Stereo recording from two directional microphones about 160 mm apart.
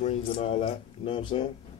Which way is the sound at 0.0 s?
40° left (ahead or behind).